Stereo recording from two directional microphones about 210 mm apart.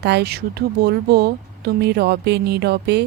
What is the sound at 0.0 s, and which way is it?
Speech, 50° right (ahead or behind).